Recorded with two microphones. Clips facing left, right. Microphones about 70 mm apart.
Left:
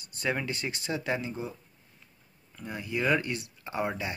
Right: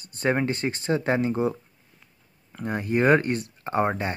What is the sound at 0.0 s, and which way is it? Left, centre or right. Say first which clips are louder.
Speech: right 7 dB; right.